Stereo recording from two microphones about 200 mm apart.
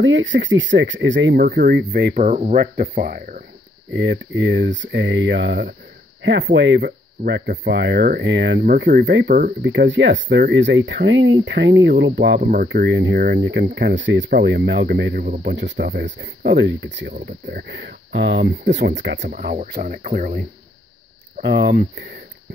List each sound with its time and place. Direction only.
0.0 s speech: 70° right (ahead or behind)
2.2 s speech: 35° right (ahead or behind)
2.5 s speech: 45° right (ahead or behind)
3.9 s speech: 65° right (ahead or behind)
12.4 s speech: 40° right (ahead or behind)
12.6 s speech: 60° right (ahead or behind)
19.2 s speech: 45° right (ahead or behind)
21.5 s speech: 55° right (ahead or behind)